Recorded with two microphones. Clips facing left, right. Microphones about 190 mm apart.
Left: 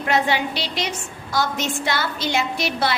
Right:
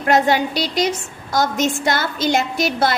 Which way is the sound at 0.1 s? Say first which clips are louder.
Right 5 dB; 45° right (ahead or behind).